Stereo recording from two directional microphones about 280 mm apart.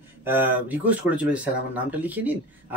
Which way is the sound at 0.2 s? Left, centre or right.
Centre.